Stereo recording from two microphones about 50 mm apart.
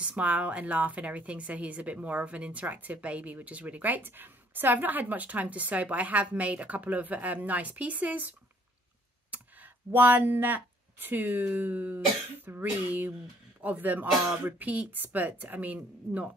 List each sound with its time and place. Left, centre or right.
0.0 s a woman's voice: right